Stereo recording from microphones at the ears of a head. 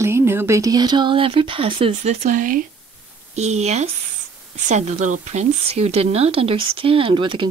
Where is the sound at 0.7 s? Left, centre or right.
Right.